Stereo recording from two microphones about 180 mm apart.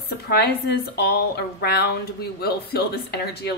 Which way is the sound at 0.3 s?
60° left (ahead or behind).